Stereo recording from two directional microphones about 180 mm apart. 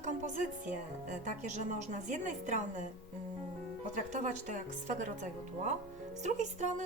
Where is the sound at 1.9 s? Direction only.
45° right (ahead or behind).